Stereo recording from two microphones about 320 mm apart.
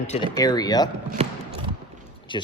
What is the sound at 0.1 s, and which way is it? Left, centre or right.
Speech, centre.